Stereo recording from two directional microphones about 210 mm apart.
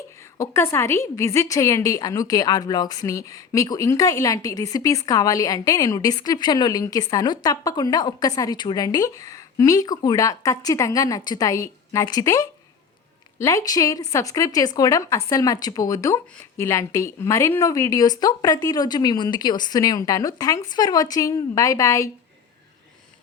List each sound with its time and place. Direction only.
0.3 s a woman's voice: 10° left (ahead or behind)